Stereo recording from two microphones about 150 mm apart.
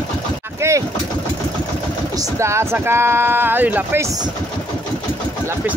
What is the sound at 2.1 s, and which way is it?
Speech, 20° right (ahead or behind).